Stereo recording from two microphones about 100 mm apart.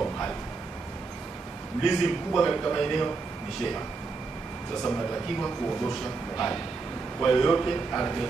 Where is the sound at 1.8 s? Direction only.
5° left (ahead or behind).